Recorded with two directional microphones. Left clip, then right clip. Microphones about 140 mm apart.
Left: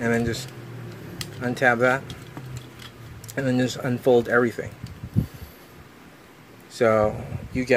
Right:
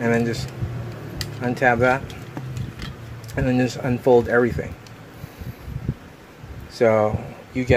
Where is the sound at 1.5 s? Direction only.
20° left (ahead or behind).